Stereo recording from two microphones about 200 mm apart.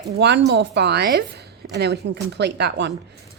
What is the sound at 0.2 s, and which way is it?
Speech, 60° right (ahead or behind).